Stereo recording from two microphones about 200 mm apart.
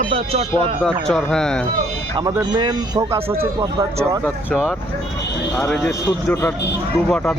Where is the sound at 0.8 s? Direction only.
Centre (ahead or behind).